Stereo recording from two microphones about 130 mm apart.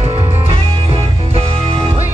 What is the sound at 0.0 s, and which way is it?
Music, 45° right (ahead or behind).